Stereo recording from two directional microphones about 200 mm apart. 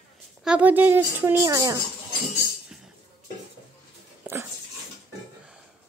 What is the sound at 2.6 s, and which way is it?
Music, 5° right (ahead or behind).